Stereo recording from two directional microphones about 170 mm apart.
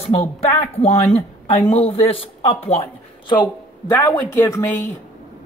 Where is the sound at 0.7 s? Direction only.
35° left (ahead or behind).